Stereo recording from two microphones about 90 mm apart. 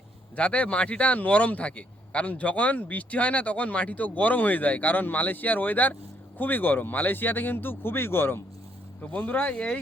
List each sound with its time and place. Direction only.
0.3 s speech: 15° left (ahead or behind)